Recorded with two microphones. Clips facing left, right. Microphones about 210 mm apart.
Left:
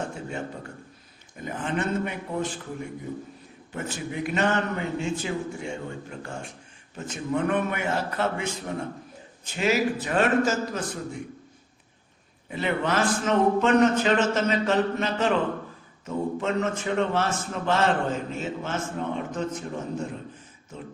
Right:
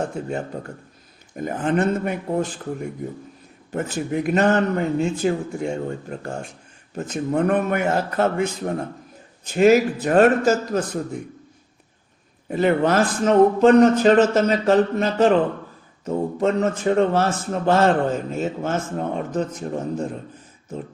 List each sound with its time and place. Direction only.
0.3 s a man's voice: 40° right (ahead or behind)
3.7 s a man's voice: 45° right (ahead or behind)
12.5 s a man's voice: 45° right (ahead or behind)